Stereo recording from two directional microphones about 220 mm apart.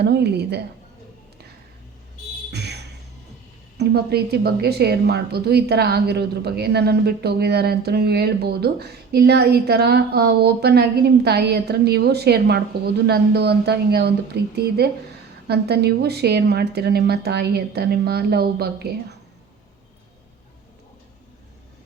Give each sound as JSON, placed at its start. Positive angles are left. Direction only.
{"t": 0.0, "sound": "a woman's voice", "side_deg": -50}
{"t": 2.5, "sound": "a sound", "side_deg": -50}
{"t": 3.8, "sound": "a woman's voice", "side_deg": -45}